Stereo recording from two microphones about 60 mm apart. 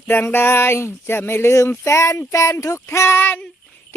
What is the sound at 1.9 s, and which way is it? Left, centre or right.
Speech, left.